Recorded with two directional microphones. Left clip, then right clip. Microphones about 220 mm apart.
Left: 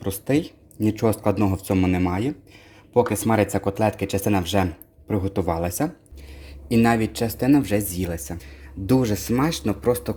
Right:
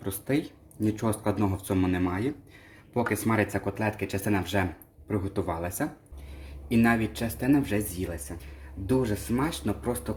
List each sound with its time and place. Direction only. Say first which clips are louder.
0.0 s speech: left 6 dB; 30° left (ahead or behind)